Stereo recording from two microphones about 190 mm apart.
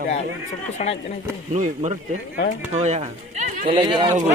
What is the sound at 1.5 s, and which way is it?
Speech, 40° right (ahead or behind).